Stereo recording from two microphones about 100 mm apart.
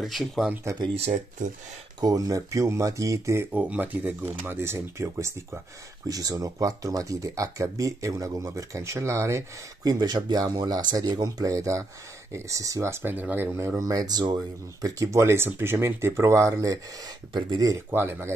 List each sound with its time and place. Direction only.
0.0 s speech: centre (ahead or behind)
2.0 s speech: 40° right (ahead or behind)
3.5 s speech: 15° right (ahead or behind)
9.8 s speech: 45° right (ahead or behind); by 13.7 s 25° right (ahead or behind)
13.7 s speech: 40° right (ahead or behind)
17.3 s speech: 50° right (ahead or behind)
17.9 s speech: 20° right (ahead or behind)